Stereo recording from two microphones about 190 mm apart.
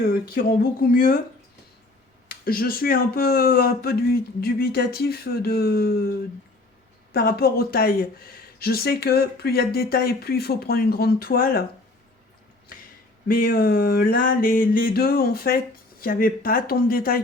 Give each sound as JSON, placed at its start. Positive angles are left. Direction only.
{"t": 0.0, "sound": "speech", "side_deg": 50}
{"t": 2.3, "sound": "speech", "side_deg": 50}
{"t": 7.1, "sound": "speech", "side_deg": 50}
{"t": 13.2, "sound": "speech", "side_deg": 50}